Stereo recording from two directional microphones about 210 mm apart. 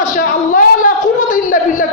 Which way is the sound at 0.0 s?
40° left (ahead or behind).